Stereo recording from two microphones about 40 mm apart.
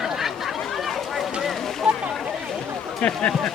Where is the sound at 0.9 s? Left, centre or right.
Centre.